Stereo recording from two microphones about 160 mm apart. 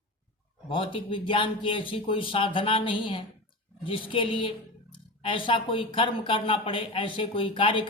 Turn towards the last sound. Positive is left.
turn(degrees=30)  # may be behind; listen again after turning